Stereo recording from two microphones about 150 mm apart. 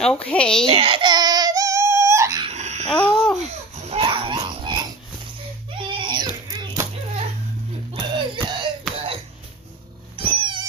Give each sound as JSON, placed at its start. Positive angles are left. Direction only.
{"t": 0.0, "sound": "speech", "side_deg": 5}
{"t": 0.7, "sound": "baby cry", "side_deg": -40}
{"t": 2.5, "sound": "a sound", "side_deg": -50}
{"t": 2.9, "sound": "babbling", "side_deg": 5}
{"t": 3.9, "sound": "dog", "side_deg": -35}
{"t": 5.9, "sound": "a sound", "side_deg": -30}
{"t": 7.9, "sound": "music", "side_deg": -30}
{"t": 10.1, "sound": "cat", "side_deg": -35}